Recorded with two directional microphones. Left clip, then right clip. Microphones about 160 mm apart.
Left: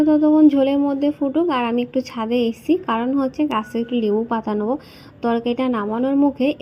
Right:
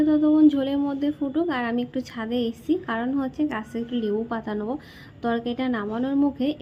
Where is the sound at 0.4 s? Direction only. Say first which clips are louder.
Left 5 dB; 10° left (ahead or behind).